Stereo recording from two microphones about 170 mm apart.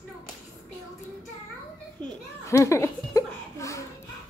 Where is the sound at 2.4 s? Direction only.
15° left (ahead or behind).